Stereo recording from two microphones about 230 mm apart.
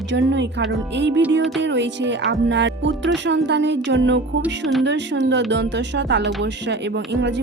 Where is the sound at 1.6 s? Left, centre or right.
Right.